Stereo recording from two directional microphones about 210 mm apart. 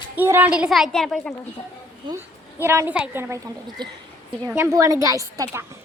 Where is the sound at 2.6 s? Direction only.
10° right (ahead or behind).